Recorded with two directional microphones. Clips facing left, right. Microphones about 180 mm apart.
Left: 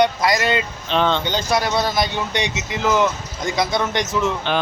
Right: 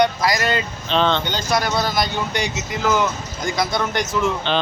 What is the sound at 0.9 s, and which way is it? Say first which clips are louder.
Speech: even; 10° left (ahead or behind).